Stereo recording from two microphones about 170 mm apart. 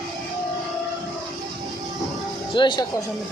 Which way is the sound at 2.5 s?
25° left (ahead or behind).